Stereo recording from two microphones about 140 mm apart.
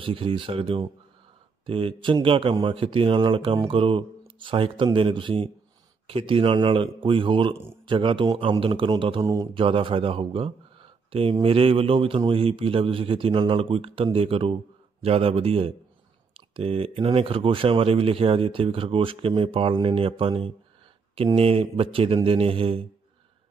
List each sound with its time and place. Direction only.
0.0 s speech: 40° right (ahead or behind)
9.2 s speech: 25° right (ahead or behind)
9.5 s speech: 40° right (ahead or behind)
11.4 s music: 40° right (ahead or behind)
12.3 s speech: 40° right (ahead or behind)
21.4 s music: 45° right (ahead or behind)